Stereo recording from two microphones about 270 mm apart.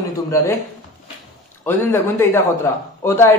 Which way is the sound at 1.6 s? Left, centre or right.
Centre.